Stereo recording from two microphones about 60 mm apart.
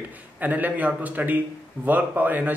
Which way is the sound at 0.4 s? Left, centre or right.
Right.